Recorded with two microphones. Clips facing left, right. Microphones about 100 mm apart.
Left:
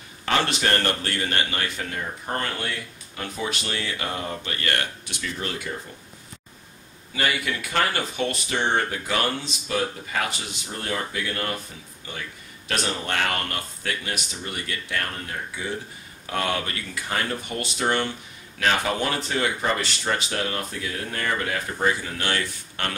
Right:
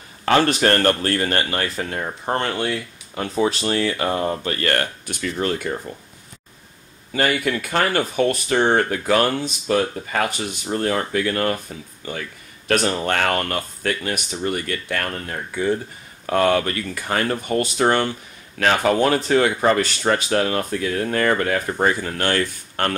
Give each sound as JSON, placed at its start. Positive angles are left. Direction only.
{"t": 0.2, "sound": "speech", "side_deg": -45}
{"t": 7.2, "sound": "speech", "side_deg": -50}
{"t": 12.6, "sound": "speech", "side_deg": -50}